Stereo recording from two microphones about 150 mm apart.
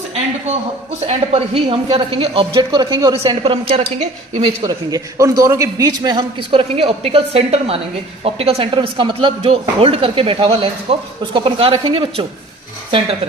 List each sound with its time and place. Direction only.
1.0 s speech: 40° right (ahead or behind)
4.6 s a man's voice: 25° right (ahead or behind)